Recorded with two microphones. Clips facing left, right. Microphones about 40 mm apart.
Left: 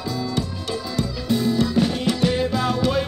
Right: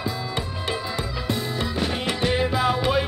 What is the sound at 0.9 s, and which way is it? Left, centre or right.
Music, centre.